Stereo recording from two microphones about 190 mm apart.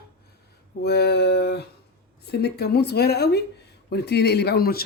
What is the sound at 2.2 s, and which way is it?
Speech, 60° left (ahead or behind).